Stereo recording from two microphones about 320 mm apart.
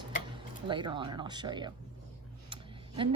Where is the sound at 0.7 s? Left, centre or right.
Centre.